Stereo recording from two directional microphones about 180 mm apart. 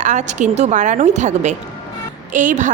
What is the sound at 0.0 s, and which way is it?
A woman's voice, 40° right (ahead or behind).